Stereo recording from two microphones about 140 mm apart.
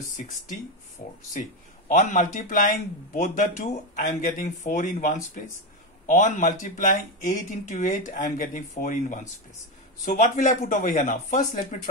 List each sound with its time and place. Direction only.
1.0 s speech: 90° left
1.9 s speech: 75° left (ahead or behind)